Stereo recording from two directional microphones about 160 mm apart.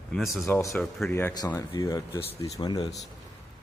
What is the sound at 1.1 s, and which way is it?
Speech, 15° left (ahead or behind).